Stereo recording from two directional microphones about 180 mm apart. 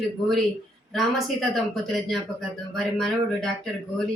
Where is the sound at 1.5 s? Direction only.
Centre (ahead or behind).